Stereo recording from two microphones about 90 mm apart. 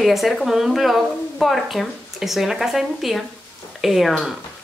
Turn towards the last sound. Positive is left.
turn(degrees=0)  # may be behind; listen again after turning